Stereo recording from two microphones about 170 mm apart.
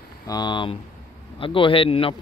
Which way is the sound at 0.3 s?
25° left (ahead or behind).